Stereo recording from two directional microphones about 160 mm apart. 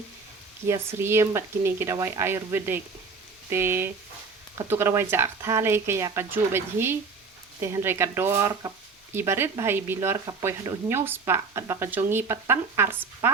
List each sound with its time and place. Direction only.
0.7 s speech: 15° right (ahead or behind)